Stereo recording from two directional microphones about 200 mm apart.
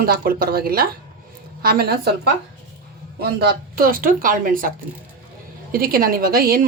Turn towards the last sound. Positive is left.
turn(degrees=-50)  # may be behind; listen again after turning